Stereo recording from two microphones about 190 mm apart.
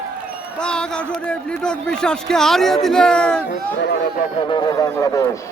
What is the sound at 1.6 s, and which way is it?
A man's voice, 5° left (ahead or behind).